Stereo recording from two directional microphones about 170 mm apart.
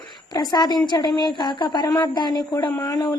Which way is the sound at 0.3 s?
25° left (ahead or behind).